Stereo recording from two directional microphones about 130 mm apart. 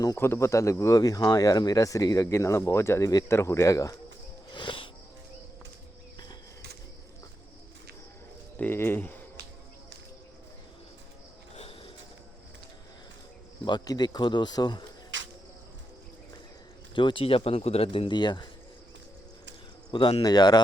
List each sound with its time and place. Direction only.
0.0 s speech: 25° left (ahead or behind)
4.5 s music: 40° left (ahead or behind)
8.5 s speech: 15° left (ahead or behind)
11.5 s a sound: 50° left (ahead or behind)
13.7 s speech: 35° left (ahead or behind)
16.9 s speech: 40° left (ahead or behind)
19.9 s speech: 45° left (ahead or behind)
20.2 s speech: 30° left (ahead or behind)